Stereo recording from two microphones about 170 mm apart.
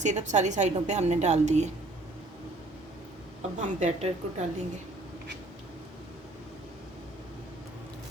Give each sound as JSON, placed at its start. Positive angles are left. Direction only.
{"t": 0.0, "sound": "a woman's voice", "side_deg": -45}
{"t": 3.6, "sound": "a woman's voice", "side_deg": -40}